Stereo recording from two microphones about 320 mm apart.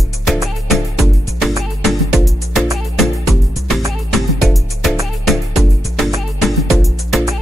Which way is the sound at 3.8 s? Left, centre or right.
Centre.